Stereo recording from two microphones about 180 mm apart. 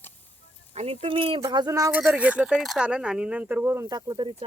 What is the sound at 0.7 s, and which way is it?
Speech, 35° right (ahead or behind).